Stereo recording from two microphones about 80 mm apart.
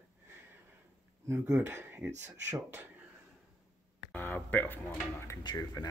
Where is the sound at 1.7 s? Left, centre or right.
Right.